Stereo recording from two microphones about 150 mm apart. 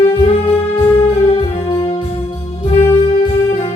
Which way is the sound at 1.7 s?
35° left (ahead or behind).